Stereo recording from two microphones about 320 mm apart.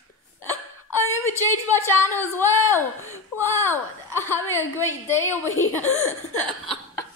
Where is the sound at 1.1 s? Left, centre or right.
Centre.